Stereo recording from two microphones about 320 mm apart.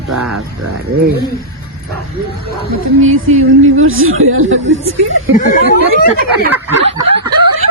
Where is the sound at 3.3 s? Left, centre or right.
Right.